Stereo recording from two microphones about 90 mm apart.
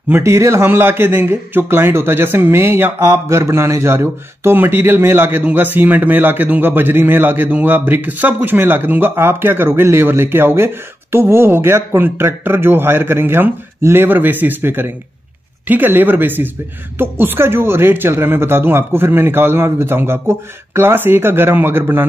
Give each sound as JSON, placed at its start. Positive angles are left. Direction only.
{"t": 0.1, "sound": "a man's voice", "side_deg": -30}